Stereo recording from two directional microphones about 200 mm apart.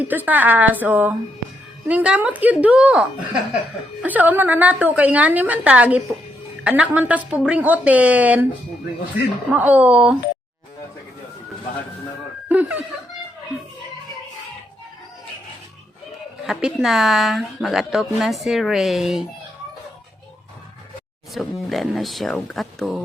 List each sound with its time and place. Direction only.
0.0 s a woman's voice: 10° right (ahead or behind)
9.5 s a woman's voice: 5° right (ahead or behind)
12.5 s speech: 10° right (ahead or behind)
16.5 s a woman's voice: 5° right (ahead or behind)
21.3 s a woman's voice: centre (ahead or behind)